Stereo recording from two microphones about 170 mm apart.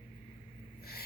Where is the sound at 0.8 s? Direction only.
65° left (ahead or behind).